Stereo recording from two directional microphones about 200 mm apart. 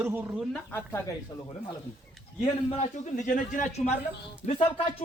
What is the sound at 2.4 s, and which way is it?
A man's voice, 30° left (ahead or behind).